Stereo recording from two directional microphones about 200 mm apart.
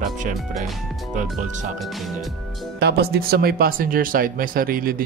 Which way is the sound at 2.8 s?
55° right (ahead or behind).